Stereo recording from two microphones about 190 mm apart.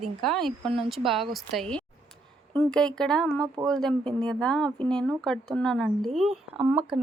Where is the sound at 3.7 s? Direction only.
5° left (ahead or behind).